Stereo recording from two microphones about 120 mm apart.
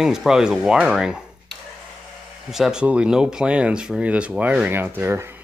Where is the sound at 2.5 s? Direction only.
5° right (ahead or behind).